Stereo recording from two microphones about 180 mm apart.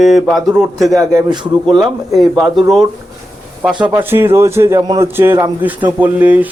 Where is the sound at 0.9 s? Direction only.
20° right (ahead or behind).